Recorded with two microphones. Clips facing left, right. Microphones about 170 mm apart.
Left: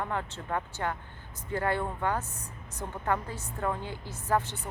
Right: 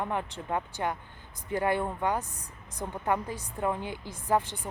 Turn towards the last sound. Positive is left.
turn(degrees=-15)  # may be behind; listen again after turning